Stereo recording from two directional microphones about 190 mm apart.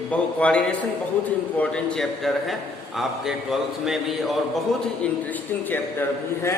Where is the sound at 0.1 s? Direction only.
5° left (ahead or behind).